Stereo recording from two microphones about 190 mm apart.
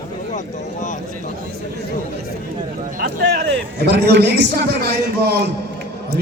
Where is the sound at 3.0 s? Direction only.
60° right (ahead or behind).